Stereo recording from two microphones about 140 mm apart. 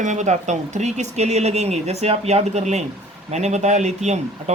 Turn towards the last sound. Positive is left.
turn(degrees=-55)  # may be behind; listen again after turning